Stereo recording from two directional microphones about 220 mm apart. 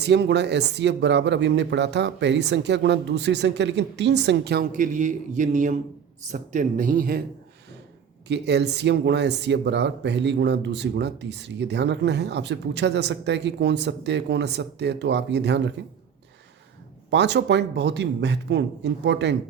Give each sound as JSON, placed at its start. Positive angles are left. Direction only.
{"t": 0.0, "sound": "speech", "side_deg": -50}
{"t": 8.3, "sound": "speech", "side_deg": -50}
{"t": 17.1, "sound": "speech", "side_deg": -50}